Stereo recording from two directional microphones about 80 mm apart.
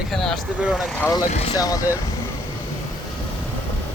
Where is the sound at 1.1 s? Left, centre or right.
Left.